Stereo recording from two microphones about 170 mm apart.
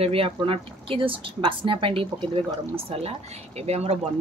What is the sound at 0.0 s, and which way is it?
Speech, 35° right (ahead or behind).